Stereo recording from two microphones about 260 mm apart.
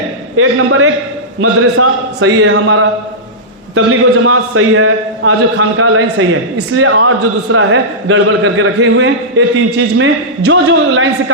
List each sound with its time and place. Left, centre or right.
0.3 s a man's voice: right